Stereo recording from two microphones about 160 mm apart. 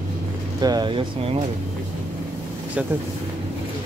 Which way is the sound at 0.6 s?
25° right (ahead or behind).